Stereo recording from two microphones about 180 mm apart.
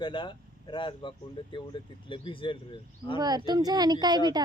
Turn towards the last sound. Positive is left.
turn(degrees=-20)  # may be behind; listen again after turning